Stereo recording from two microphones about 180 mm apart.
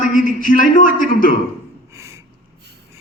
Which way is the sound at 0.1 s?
50° left (ahead or behind).